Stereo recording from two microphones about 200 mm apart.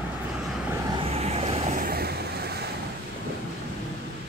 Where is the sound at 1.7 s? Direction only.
45° right (ahead or behind).